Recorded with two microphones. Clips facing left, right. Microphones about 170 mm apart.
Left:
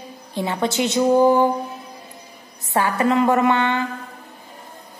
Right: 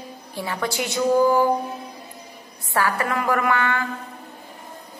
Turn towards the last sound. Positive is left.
turn(degrees=25)  # may be behind; listen again after turning